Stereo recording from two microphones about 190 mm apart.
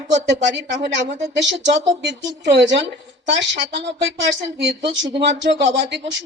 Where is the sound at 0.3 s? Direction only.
65° right (ahead or behind).